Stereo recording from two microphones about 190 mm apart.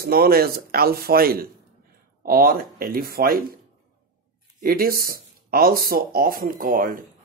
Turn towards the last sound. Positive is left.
turn(degrees=-45)  # may be behind; listen again after turning